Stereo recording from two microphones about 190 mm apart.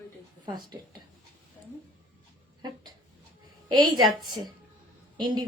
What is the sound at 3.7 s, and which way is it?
A woman's voice, 20° right (ahead or behind).